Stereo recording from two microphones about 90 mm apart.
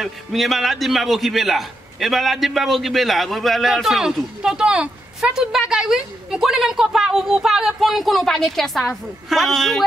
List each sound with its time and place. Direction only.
0.0 s a man's voice: centre (ahead or behind)